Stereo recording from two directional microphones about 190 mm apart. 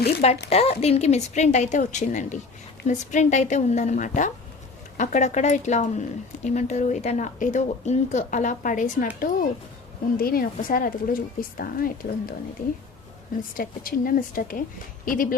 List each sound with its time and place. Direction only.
0.5 s speech: 35° left (ahead or behind)
10.2 s speech: 50° left (ahead or behind)
13.6 s speech: 50° left (ahead or behind)